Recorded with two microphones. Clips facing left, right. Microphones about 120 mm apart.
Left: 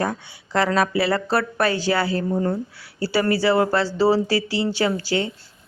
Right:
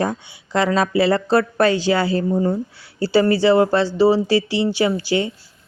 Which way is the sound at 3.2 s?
20° right (ahead or behind).